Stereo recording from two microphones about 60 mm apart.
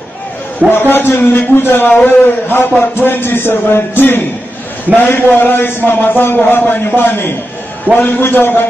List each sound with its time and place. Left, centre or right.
0.7 s a man's voice: left